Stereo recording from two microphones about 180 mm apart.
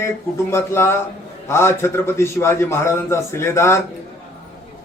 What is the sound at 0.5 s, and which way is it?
A man's voice, 15° left (ahead or behind).